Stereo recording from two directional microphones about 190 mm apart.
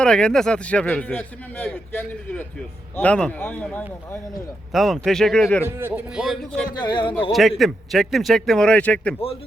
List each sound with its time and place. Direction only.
0.0 s a man's voice: 5° left (ahead or behind)
5.6 s speech: 10° right (ahead or behind)
6.7 s speech: 25° left (ahead or behind)
7.6 s speech: centre (ahead or behind)